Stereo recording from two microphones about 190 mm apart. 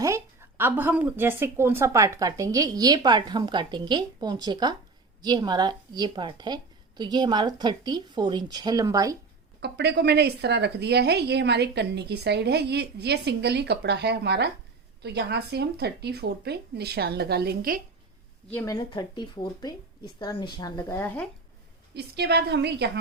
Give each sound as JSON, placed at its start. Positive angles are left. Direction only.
{"t": 0.0, "sound": "speech", "side_deg": -15}
{"t": 9.6, "sound": "a woman's voice", "side_deg": -60}
{"t": 18.5, "sound": "speech", "side_deg": 20}
{"t": 21.9, "sound": "a woman's voice", "side_deg": -60}